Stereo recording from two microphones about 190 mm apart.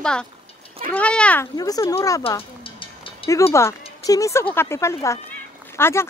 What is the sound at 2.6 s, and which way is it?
Music, 25° left (ahead or behind).